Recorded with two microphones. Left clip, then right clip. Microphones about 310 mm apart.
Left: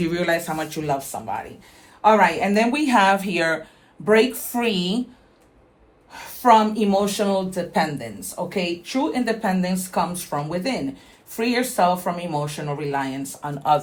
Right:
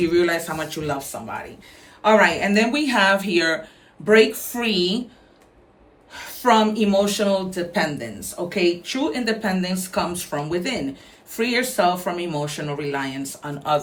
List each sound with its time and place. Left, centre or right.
0.0 s speech: centre
6.4 s speech: centre